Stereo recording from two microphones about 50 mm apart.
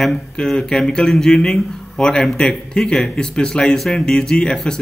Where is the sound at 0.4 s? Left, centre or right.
Centre.